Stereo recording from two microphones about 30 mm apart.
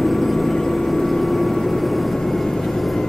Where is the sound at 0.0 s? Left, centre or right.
Centre.